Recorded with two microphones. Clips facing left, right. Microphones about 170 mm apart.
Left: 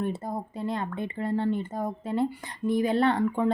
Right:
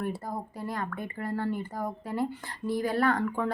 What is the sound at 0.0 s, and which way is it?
Speech, 20° left (ahead or behind).